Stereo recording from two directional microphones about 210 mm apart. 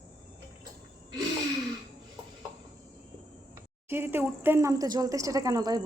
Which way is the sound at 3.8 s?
10° right (ahead or behind).